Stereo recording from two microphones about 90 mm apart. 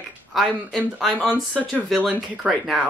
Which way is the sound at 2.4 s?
5° right (ahead or behind).